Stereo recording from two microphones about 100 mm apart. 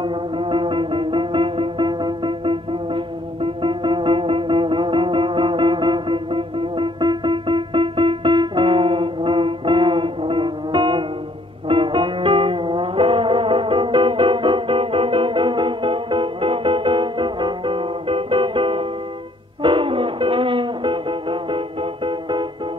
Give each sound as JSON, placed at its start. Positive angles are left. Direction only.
{"t": 0.0, "sound": "music", "side_deg": -55}